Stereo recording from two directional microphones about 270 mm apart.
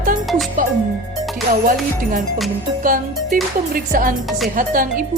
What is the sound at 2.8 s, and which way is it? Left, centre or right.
Music, right.